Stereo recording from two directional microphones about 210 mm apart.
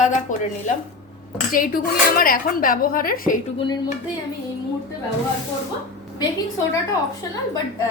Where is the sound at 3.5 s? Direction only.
20° left (ahead or behind).